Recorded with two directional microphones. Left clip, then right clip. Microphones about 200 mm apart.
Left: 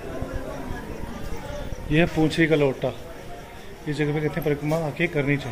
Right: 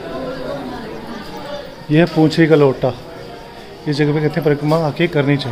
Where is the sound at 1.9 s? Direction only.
10° right (ahead or behind).